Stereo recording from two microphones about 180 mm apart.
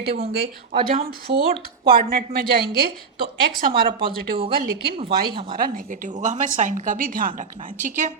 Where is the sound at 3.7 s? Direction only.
25° right (ahead or behind).